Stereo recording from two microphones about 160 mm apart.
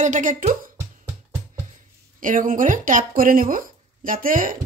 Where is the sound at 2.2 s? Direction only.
55° right (ahead or behind).